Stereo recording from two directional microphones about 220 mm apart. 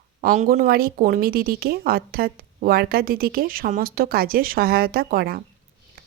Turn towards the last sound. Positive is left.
turn(degrees=-45)  # may be behind; listen again after turning